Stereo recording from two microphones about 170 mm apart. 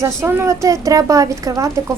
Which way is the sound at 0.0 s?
15° right (ahead or behind).